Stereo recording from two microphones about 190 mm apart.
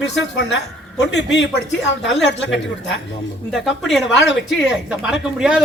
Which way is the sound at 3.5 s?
Centre (ahead or behind).